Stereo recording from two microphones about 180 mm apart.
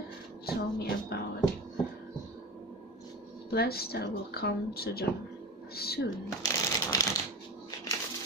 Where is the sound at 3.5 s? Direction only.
60° left (ahead or behind).